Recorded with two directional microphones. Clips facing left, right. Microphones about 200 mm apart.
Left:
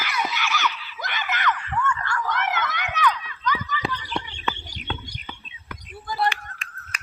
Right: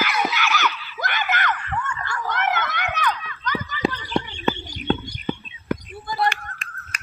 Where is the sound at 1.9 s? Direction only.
30° right (ahead or behind).